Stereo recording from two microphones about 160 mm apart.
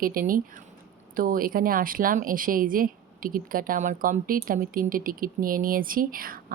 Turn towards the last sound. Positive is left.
turn(degrees=-60)  # may be behind; listen again after turning